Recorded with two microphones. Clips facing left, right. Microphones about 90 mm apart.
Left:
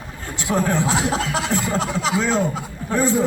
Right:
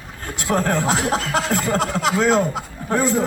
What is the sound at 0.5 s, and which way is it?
Music, 45° right (ahead or behind).